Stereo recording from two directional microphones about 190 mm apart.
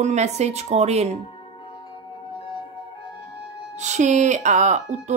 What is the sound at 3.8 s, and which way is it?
Speech, 40° right (ahead or behind).